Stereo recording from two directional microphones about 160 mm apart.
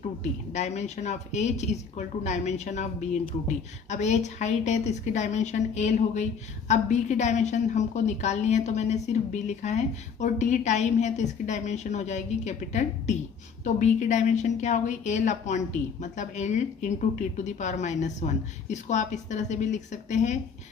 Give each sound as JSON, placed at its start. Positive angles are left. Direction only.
{"t": 0.2, "sound": "a woman's voice", "side_deg": 45}